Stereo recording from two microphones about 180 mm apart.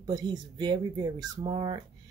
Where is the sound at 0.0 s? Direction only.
20° right (ahead or behind).